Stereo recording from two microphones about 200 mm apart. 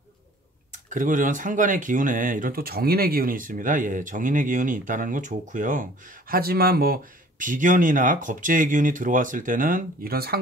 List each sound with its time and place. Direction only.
0.7 s speech: 40° right (ahead or behind)